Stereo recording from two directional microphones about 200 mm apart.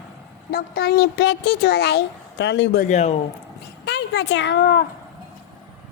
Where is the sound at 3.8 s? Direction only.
60° left (ahead or behind).